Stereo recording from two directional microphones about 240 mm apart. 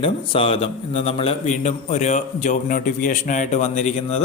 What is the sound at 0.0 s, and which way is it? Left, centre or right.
Mantra, left.